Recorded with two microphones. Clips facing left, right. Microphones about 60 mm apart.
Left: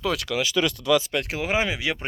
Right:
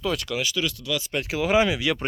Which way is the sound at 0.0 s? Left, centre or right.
Left.